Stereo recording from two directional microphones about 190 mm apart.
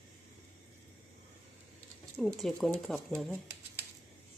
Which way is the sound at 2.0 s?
Centre (ahead or behind).